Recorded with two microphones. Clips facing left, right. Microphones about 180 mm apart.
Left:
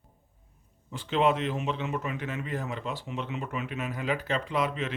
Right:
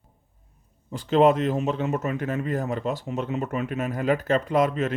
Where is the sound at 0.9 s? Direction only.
40° right (ahead or behind).